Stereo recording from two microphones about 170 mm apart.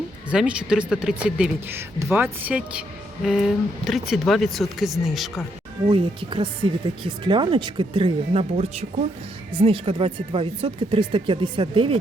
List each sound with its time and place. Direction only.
0.3 s speech: 5° right (ahead or behind)
5.9 s speech: 30° right (ahead or behind)